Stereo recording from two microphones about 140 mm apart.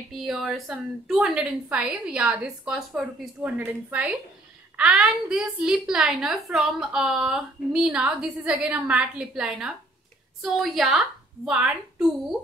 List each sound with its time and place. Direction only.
0.1 s a woman's voice: centre (ahead or behind)